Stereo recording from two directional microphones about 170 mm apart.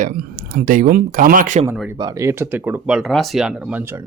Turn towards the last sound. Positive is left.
turn(degrees=-10)  # may be behind; listen again after turning